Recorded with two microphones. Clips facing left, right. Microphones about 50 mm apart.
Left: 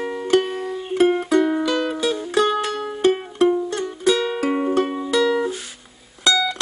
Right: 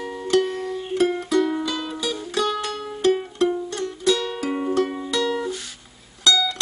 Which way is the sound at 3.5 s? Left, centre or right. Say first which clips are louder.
Left 4 dB; centre.